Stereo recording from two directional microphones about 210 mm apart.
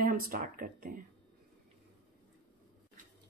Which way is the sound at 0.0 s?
40° right (ahead or behind).